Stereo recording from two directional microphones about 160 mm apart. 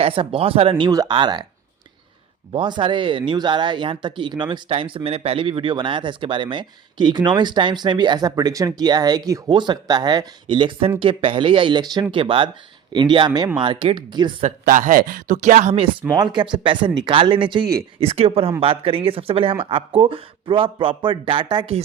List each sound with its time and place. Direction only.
0.0 s speech: 35° right (ahead or behind)
2.5 s speech: 30° right (ahead or behind)
14.4 s speech: 55° right (ahead or behind); by 21.8 s 30° right (ahead or behind)